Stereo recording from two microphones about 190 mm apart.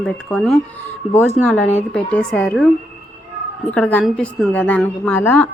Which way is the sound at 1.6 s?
35° left (ahead or behind).